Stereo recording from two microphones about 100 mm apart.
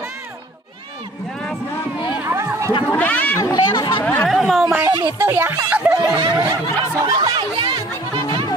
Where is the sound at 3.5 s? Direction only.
45° left (ahead or behind).